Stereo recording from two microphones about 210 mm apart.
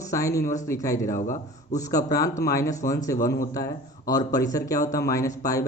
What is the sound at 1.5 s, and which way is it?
Speech, 15° left (ahead or behind).